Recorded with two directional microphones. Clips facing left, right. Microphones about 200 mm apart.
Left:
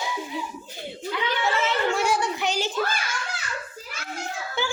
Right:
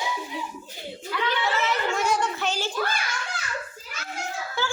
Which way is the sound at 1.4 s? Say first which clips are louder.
Left 3 dB; 25° left (ahead or behind).